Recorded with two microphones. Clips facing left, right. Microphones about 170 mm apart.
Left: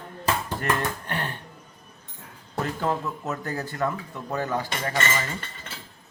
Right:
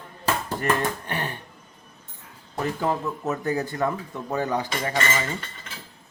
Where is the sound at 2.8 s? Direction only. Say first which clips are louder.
Right 2 dB; 15° right (ahead or behind).